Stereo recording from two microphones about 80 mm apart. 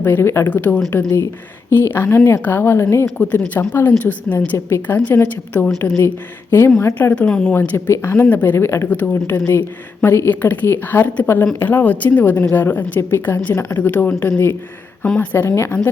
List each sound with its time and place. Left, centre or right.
0.0 s speech: left
0.5 s speech: centre
0.9 s a woman's voice: left
7.1 s speech: centre
7.5 s speech: left
8.9 s speech: centre
15.0 s speech: centre
15.3 s speech: left